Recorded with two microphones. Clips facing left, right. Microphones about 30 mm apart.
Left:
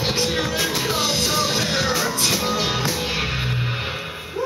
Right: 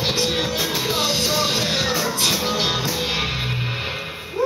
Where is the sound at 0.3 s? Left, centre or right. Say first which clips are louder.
Even; right.